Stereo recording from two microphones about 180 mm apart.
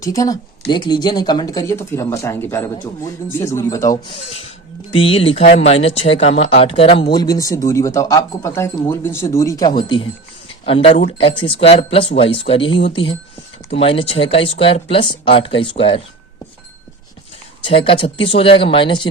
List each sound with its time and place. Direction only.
0.0 s speech: 20° left (ahead or behind)
4.9 s speech: 30° left (ahead or behind)
7.1 s speech: 20° left (ahead or behind)
17.6 s speech: 30° left (ahead or behind)